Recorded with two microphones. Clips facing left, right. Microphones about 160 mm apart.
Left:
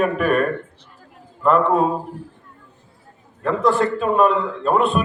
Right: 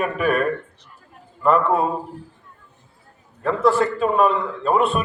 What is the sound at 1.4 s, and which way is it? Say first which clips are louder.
Speech: left 2 dB; centre (ahead or behind).